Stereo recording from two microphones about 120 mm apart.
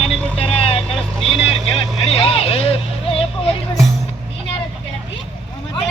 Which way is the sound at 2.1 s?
55° left (ahead or behind).